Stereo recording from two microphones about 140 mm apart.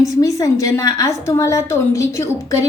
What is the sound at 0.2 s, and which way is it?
A woman's voice, 25° left (ahead or behind).